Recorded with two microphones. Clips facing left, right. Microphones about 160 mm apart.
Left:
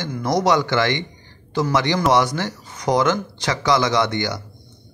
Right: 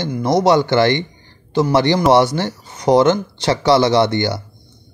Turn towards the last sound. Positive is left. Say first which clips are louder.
# right 5 dB
turn(degrees=-30)  # may be behind; listen again after turning